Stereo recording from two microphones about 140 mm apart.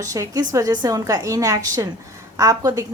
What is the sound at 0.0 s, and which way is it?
A woman's voice, 25° right (ahead or behind).